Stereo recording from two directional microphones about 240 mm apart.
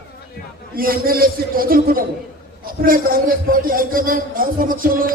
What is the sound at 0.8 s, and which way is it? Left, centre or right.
A man's voice, right.